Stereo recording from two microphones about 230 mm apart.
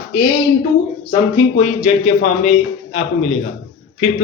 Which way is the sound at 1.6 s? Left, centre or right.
Left.